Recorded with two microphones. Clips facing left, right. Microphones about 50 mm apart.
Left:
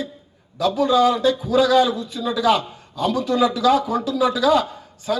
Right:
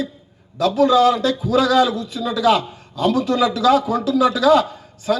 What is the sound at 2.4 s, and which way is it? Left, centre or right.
A man's voice, right.